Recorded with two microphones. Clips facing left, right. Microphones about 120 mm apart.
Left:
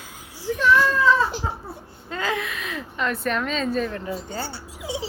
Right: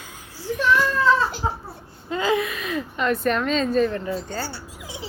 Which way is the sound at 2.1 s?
5° right (ahead or behind).